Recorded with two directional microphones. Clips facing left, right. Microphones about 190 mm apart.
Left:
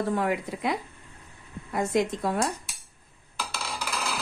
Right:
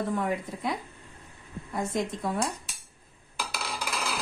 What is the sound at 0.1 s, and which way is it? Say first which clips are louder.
Speech: left 2 dB; 80° left.